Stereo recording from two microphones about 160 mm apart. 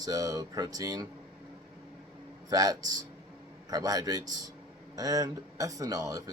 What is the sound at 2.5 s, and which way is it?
Speech, 20° right (ahead or behind).